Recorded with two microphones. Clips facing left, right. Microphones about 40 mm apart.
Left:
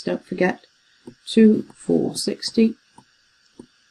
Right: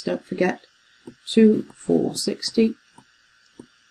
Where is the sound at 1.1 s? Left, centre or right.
Right.